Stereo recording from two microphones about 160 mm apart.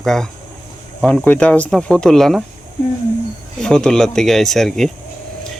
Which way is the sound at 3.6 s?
5° left (ahead or behind).